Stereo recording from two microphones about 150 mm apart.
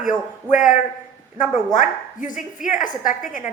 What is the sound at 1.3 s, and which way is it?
A woman's voice, 60° left (ahead or behind).